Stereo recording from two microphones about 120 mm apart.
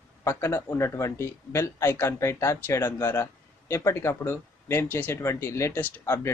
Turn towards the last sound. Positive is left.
turn(degrees=20)  # may be behind; listen again after turning